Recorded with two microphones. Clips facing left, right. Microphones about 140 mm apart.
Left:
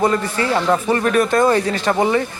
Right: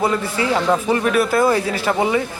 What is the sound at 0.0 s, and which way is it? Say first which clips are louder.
A man's voice: left 2 dB; 10° right (ahead or behind).